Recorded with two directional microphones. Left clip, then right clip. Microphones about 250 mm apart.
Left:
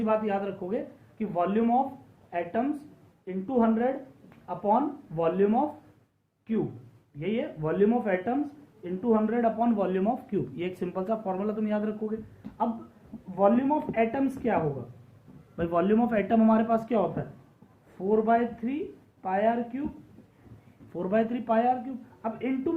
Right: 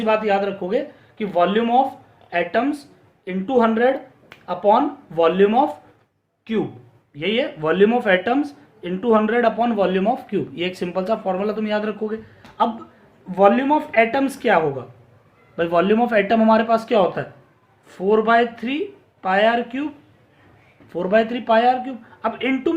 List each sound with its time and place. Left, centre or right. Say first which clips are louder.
0.0 s a man's voice: right 9 dB; right
7.2 s a man's voice: right 10 dB; right
13.3 s a man's voice: right 9 dB; right
20.9 s a man's voice: right 9 dB; right